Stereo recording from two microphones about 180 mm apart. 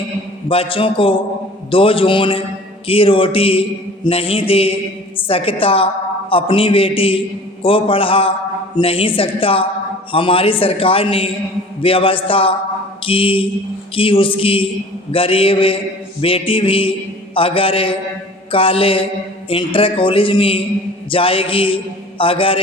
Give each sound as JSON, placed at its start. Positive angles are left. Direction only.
{"t": 0.4, "sound": "a man's voice", "side_deg": 30}